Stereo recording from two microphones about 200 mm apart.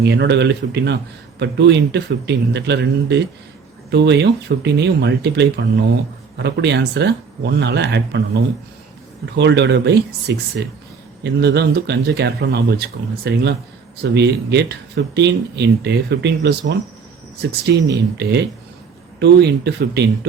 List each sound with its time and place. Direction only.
0.0 s speech: 60° right (ahead or behind)